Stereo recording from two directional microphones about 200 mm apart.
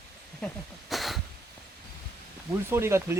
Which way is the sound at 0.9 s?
Centre (ahead or behind).